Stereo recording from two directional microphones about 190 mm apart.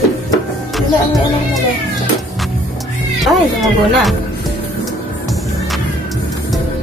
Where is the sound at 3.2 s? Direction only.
Centre (ahead or behind).